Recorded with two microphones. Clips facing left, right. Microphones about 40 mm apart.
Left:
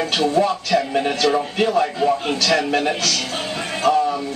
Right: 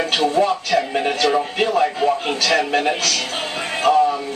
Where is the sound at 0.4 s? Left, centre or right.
Centre.